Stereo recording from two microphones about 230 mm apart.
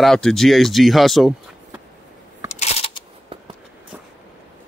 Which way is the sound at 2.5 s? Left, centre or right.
Left.